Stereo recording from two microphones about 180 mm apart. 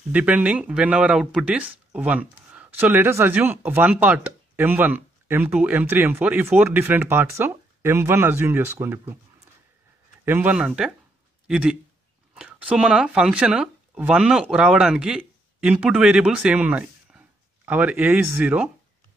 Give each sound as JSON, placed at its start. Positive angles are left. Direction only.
{"t": 0.1, "sound": "speech", "side_deg": -10}
{"t": 10.2, "sound": "speech", "side_deg": -10}